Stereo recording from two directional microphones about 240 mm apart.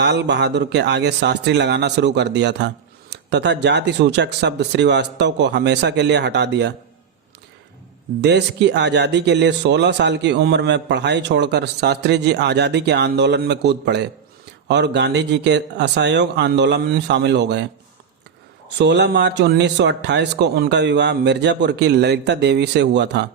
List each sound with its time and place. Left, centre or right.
0.0 s speech: right
8.2 s speech: right
18.8 s speech: right